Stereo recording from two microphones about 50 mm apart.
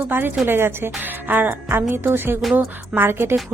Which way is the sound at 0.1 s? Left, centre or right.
Right.